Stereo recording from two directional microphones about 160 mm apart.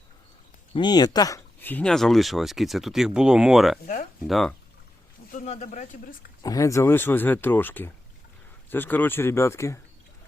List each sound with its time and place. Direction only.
0.7 s speech: 25° left (ahead or behind)
1.6 s speech: 10° left (ahead or behind)
5.3 s speech: 45° left (ahead or behind)
6.4 s speech: 20° left (ahead or behind)